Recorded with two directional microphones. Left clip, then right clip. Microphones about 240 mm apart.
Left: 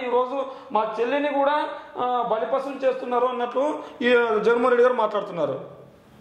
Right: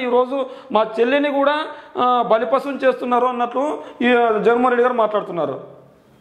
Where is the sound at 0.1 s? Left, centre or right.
Right.